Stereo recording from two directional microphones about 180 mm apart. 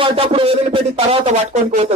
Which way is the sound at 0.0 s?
30° right (ahead or behind).